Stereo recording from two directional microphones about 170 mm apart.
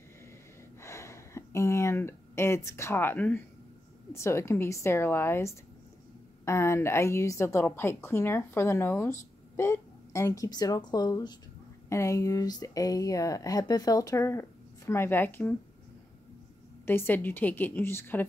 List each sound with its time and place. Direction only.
0.7 s a sound: 15° left (ahead or behind)
4.1 s a woman's voice: 15° left (ahead or behind)
16.8 s a woman's voice: 15° left (ahead or behind)